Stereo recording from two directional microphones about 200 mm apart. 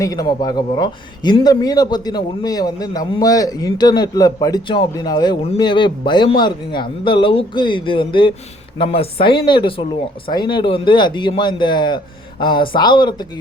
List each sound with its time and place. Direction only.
0.0 s speech: 20° left (ahead or behind)